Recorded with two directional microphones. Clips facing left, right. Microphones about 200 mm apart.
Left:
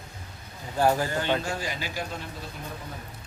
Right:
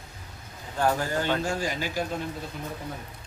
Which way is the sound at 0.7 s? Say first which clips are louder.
Left 2 dB; 10° left (ahead or behind).